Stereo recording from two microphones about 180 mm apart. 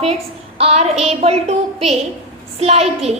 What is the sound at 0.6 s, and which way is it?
A woman's voice, 35° right (ahead or behind).